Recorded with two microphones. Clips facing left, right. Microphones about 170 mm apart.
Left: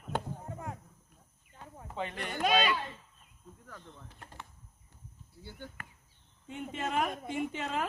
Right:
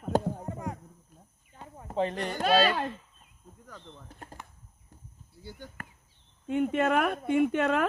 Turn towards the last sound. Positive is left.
turn(degrees=-60)  # may be behind; listen again after turning